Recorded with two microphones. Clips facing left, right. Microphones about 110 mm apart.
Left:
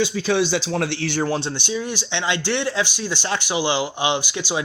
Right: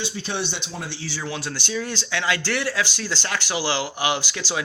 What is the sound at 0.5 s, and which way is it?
Speech, 90° left.